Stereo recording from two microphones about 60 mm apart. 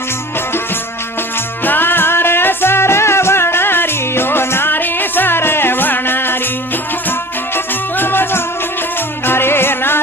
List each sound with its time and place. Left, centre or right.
1.6 s music: left
7.5 s music: left